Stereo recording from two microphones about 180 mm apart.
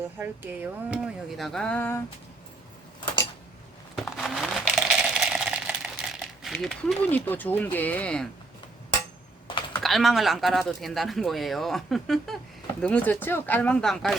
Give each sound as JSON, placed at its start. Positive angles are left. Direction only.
{"t": 0.2, "sound": "speech", "side_deg": -10}
{"t": 3.9, "sound": "a sound", "side_deg": 0}
{"t": 7.3, "sound": "speech", "side_deg": 10}
{"t": 9.8, "sound": "speech", "side_deg": 0}